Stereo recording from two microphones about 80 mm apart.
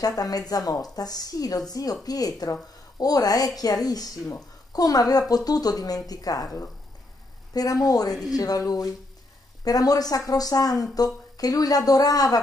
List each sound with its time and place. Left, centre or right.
0.0 s speech: left